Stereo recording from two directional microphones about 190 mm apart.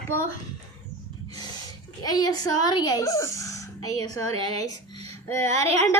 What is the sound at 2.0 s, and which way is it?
Speech, 20° left (ahead or behind).